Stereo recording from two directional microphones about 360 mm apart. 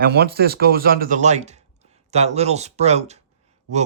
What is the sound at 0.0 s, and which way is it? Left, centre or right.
Speech, right.